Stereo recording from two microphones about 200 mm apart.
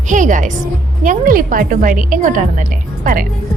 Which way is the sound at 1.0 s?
45° right (ahead or behind).